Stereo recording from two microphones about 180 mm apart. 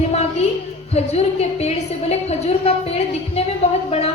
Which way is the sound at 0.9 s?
35° left (ahead or behind).